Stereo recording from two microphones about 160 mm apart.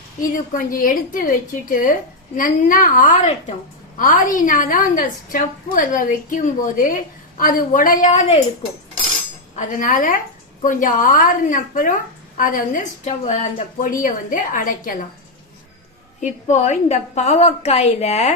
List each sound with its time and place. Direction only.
0.2 s a woman's voice: 60° left (ahead or behind)
9.6 s a woman's voice: 55° left (ahead or behind)
16.2 s a woman's voice: 45° left (ahead or behind)